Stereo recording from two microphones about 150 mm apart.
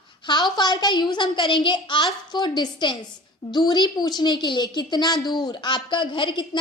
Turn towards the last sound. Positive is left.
turn(degrees=30)  # may be behind; listen again after turning